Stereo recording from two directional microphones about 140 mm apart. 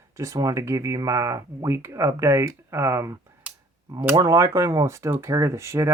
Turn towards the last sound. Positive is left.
turn(degrees=-20)  # may be behind; listen again after turning